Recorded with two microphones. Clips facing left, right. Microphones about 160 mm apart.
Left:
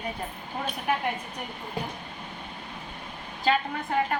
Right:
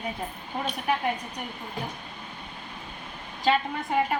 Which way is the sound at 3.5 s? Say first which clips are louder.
Right 1 dB; 5° right (ahead or behind).